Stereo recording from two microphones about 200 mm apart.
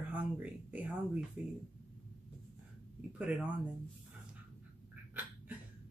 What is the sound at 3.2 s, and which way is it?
Speech, 5° right (ahead or behind).